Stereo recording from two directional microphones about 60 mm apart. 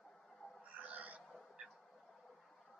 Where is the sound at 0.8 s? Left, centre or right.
Right.